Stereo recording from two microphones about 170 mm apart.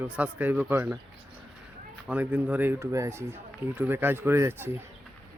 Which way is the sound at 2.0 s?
10° right (ahead or behind).